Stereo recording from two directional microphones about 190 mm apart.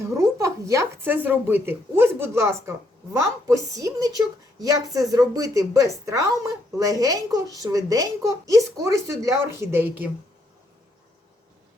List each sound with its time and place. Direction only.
0.0 s a woman's voice: 15° right (ahead or behind)